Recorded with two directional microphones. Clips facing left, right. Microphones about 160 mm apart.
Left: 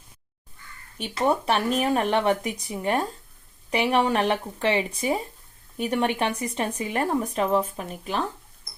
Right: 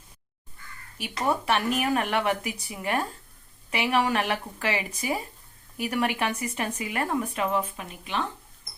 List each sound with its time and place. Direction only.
0.9 s speech: 30° left (ahead or behind)